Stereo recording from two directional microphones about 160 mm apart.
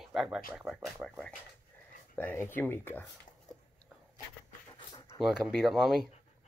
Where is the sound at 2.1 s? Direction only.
10° left (ahead or behind).